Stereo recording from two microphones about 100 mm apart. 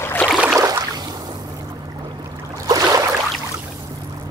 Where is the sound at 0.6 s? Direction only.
40° right (ahead or behind).